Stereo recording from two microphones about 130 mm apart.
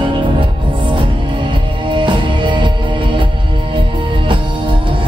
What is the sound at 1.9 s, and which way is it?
Music, 40° right (ahead or behind).